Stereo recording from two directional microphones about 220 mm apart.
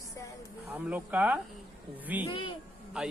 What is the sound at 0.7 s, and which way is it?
Speech, 5° right (ahead or behind).